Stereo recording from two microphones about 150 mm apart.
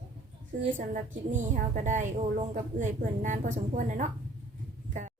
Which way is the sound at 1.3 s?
55° right (ahead or behind).